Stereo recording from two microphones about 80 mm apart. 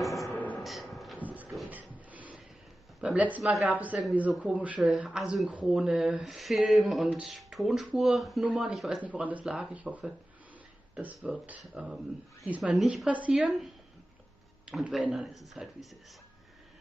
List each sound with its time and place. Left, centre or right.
0.3 s a sound: centre
0.6 s a sound: centre
1.2 s a sound: centre
3.0 s speech: centre
3.4 s speech: centre
3.7 s a man's voice: centre
8.5 s a man's voice: centre
9.0 s a man's voice: centre
14.7 s speech: centre